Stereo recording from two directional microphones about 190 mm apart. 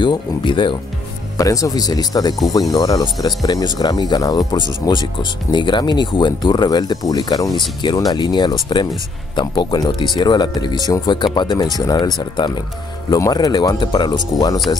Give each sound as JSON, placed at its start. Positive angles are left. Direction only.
{"t": 0.0, "sound": "speech", "side_deg": 25}